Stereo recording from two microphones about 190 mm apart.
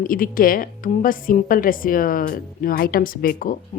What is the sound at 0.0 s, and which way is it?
A woman's voice, 50° left (ahead or behind).